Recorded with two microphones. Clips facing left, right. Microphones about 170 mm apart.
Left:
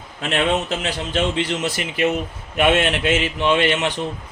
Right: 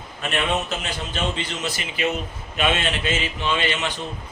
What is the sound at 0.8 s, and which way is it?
A man's voice, 85° left.